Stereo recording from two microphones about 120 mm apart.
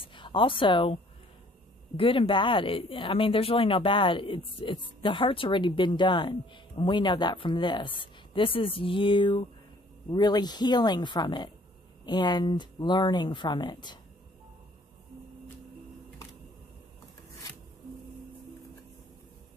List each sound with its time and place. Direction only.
0.0 s a woman's voice: 45° left (ahead or behind)
2.0 s speech: 45° left (ahead or behind)